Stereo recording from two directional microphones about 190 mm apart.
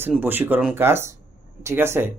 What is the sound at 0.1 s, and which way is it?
Speech, 10° right (ahead or behind).